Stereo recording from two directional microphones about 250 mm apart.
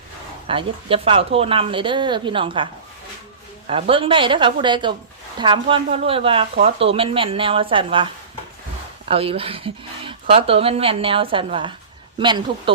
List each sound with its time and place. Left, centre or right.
0.4 s speech: right
3.7 s speech: right